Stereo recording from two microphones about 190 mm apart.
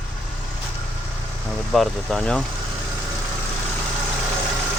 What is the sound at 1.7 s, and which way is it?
Speech, centre (ahead or behind).